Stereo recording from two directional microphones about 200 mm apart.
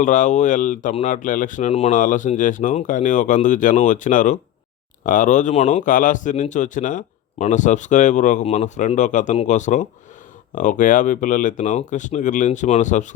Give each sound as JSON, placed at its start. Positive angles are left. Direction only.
{"t": 0.0, "sound": "speech", "side_deg": 40}